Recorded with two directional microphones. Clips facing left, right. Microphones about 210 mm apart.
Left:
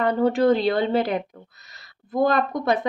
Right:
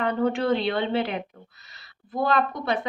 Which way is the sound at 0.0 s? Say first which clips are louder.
Left 5 dB; 35° left (ahead or behind).